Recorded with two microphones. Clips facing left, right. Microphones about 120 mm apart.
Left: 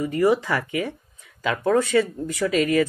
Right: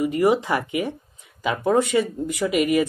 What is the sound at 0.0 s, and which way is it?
Speech, 20° right (ahead or behind).